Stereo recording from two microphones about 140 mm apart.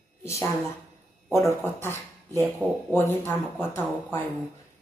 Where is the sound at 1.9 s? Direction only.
25° right (ahead or behind).